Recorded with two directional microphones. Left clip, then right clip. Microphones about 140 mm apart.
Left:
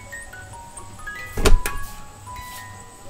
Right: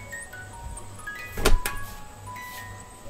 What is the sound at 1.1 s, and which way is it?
Music, centre (ahead or behind).